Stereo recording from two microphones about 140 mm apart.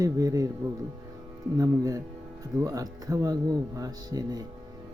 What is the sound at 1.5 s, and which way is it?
Speech, 25° right (ahead or behind).